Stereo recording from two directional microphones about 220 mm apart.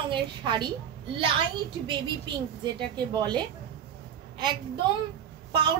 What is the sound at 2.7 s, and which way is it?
Speech, 20° right (ahead or behind).